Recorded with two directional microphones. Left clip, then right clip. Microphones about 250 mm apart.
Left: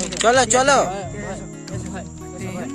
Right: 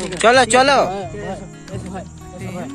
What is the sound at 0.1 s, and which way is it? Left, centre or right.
Speech, centre.